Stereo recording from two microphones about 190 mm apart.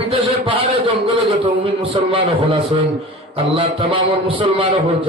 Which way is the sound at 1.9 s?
30° right (ahead or behind).